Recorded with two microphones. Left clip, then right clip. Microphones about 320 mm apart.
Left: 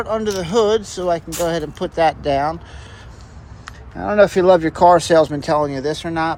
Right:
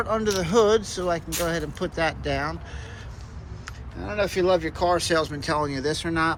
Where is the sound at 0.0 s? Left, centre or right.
Centre.